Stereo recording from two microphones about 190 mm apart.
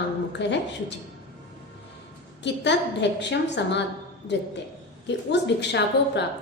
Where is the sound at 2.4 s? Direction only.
65° left (ahead or behind).